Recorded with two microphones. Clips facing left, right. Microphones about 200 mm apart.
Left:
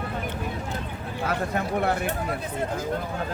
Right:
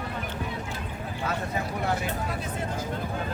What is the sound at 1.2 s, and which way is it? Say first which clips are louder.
Speech: left 4 dB; 60° left (ahead or behind).